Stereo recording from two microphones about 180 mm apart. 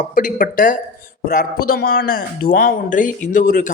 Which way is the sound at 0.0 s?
45° left (ahead or behind).